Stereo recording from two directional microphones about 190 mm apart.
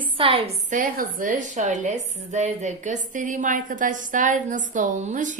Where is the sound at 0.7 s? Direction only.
45° right (ahead or behind).